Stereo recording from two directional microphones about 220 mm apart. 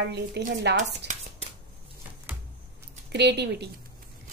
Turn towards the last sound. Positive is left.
turn(degrees=-50)  # may be behind; listen again after turning